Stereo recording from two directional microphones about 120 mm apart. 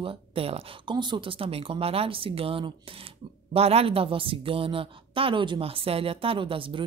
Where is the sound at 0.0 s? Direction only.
50° right (ahead or behind).